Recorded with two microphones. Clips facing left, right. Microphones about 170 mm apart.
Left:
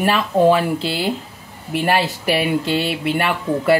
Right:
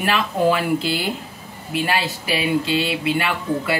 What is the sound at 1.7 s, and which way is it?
Speech, 55° left (ahead or behind).